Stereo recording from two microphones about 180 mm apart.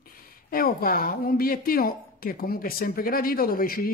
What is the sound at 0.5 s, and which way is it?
Speech, 55° left (ahead or behind).